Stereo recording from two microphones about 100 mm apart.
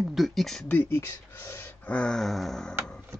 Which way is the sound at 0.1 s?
Centre (ahead or behind).